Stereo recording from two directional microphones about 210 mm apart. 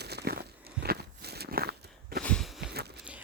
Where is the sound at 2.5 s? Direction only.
50° right (ahead or behind).